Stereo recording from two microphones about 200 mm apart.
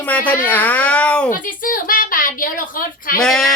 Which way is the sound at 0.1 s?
5° left (ahead or behind).